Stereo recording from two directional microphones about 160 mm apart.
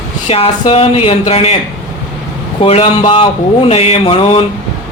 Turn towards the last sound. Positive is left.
turn(degrees=35)  # may be behind; listen again after turning